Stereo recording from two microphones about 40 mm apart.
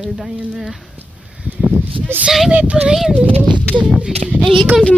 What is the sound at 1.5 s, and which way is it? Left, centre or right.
Sheep, right.